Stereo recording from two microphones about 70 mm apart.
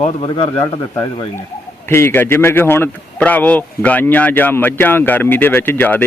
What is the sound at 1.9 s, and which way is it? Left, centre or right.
Speech, left.